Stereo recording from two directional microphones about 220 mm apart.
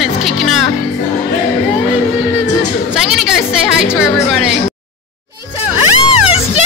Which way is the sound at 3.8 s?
5° right (ahead or behind).